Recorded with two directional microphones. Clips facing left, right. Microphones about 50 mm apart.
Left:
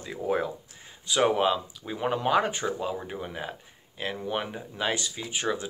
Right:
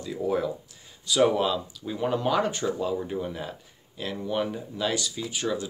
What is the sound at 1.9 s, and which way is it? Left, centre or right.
Speech, left.